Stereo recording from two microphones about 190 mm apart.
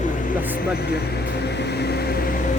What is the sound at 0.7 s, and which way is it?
Speech, 55° left (ahead or behind).